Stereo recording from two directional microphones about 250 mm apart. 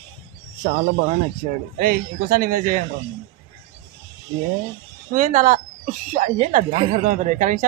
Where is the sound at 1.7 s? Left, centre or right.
Right.